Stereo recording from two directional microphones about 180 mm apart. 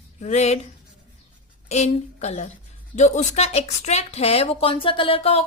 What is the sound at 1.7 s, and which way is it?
A woman's voice, 40° left (ahead or behind).